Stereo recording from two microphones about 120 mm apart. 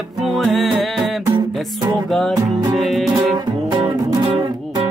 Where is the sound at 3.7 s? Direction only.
40° right (ahead or behind).